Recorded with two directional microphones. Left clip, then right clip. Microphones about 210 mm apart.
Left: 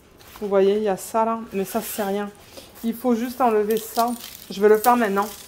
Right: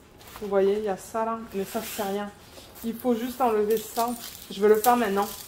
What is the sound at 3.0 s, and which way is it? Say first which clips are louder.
Speech: left 4 dB; 45° left (ahead or behind).